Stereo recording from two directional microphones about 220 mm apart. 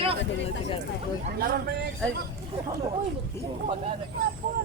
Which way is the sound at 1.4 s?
45° right (ahead or behind).